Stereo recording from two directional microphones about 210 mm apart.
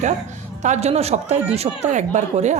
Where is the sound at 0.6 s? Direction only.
35° right (ahead or behind).